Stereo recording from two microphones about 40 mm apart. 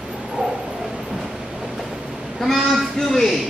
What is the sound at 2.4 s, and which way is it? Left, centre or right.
Speech, centre.